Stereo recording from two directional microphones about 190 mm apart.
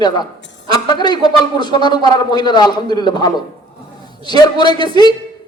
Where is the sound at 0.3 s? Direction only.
70° left (ahead or behind).